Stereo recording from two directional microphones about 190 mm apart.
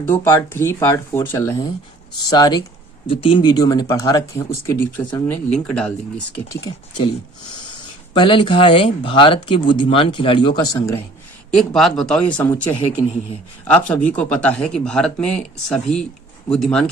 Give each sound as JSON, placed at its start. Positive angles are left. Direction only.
{"t": 0.0, "sound": "speech", "side_deg": 10}
{"t": 6.6, "sound": "speech", "side_deg": 25}
{"t": 8.1, "sound": "speech", "side_deg": 25}
{"t": 11.5, "sound": "speech", "side_deg": 0}
{"t": 13.8, "sound": "speech", "side_deg": 5}